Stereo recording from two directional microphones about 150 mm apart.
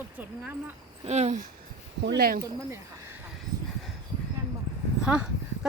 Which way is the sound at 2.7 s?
20° right (ahead or behind).